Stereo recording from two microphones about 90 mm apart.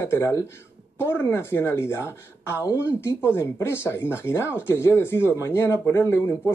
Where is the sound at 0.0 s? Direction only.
30° left (ahead or behind).